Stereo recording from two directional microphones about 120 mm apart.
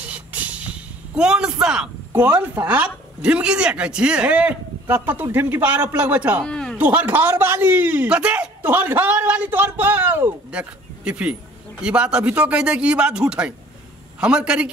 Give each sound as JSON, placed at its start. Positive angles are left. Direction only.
{"t": 0.0, "sound": "vehicle", "side_deg": -10}
{"t": 1.1, "sound": "a man's voice", "side_deg": -5}
{"t": 6.4, "sound": "a sound", "side_deg": 5}
{"t": 6.8, "sound": "a man's voice", "side_deg": -15}